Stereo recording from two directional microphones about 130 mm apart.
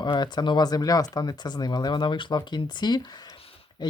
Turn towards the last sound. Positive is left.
turn(degrees=45)  # may be behind; listen again after turning